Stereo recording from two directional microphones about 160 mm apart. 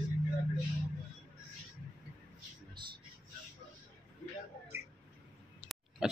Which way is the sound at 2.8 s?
30° right (ahead or behind).